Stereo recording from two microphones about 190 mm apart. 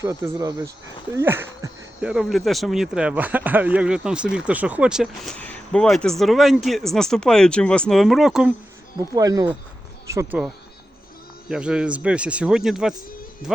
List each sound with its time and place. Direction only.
0.0 s speech: 20° right (ahead or behind)
9.0 s speech: 20° right (ahead or behind)
10.4 s speech: 5° right (ahead or behind)